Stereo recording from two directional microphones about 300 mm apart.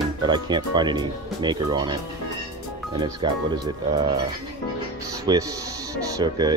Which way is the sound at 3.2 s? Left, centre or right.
Centre.